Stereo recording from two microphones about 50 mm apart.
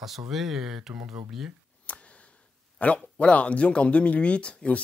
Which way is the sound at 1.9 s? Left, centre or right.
Left.